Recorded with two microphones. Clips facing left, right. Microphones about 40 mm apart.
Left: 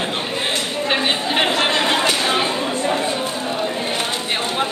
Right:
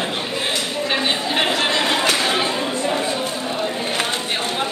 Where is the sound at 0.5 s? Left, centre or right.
Left.